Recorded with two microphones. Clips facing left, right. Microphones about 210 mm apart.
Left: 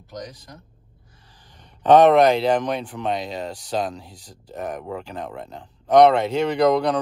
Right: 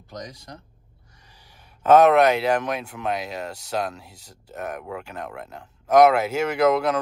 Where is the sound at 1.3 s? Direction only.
10° right (ahead or behind).